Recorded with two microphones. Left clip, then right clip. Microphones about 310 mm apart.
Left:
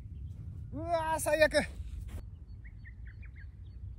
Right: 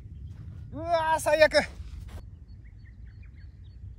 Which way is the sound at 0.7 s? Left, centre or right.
Centre.